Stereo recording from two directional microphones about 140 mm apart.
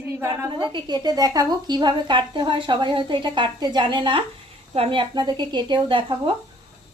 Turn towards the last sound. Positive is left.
turn(degrees=-35)  # may be behind; listen again after turning